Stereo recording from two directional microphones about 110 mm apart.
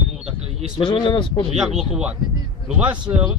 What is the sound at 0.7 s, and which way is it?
Speech, 50° left (ahead or behind).